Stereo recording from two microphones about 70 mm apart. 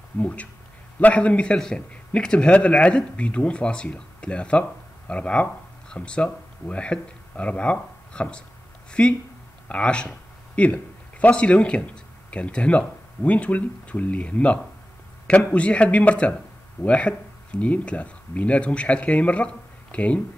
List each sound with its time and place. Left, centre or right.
0.2 s a man's voice: left